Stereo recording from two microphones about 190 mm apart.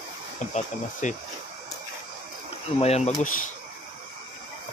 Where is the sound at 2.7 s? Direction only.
35° left (ahead or behind).